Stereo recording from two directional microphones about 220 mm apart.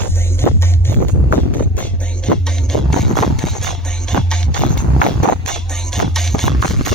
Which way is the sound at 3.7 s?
5° left (ahead or behind).